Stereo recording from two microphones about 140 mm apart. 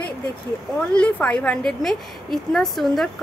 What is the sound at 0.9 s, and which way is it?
A woman's voice, 5° left (ahead or behind).